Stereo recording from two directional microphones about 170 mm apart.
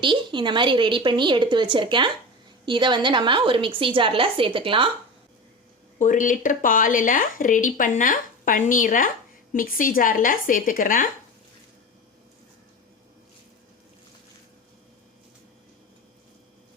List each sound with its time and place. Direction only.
0.0 s a woman's voice: 30° right (ahead or behind)
6.0 s speech: 50° left (ahead or behind)